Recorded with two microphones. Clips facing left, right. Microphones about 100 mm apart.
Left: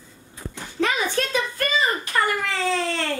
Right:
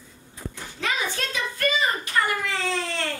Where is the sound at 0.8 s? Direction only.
45° left (ahead or behind).